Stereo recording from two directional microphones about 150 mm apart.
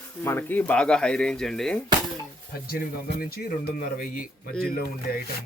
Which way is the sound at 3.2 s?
90° left.